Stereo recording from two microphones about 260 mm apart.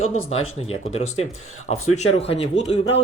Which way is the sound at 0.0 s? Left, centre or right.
Left.